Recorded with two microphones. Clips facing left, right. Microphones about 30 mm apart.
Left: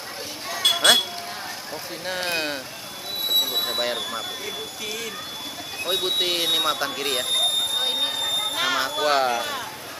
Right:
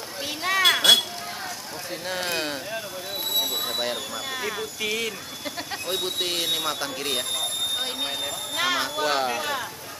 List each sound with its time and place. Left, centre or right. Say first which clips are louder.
0.6 s a sound: right 2 dB; right
2.0 s speech: left 2 dB; centre
3.3 s vehicle: left 3 dB; centre
4.4 s speech: right 3 dB; right
5.9 s a sound: left 5 dB; centre
9.3 s speech: left 1 dB; centre